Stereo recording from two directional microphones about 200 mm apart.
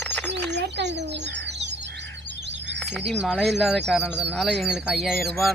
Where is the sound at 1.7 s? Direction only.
60° right (ahead or behind).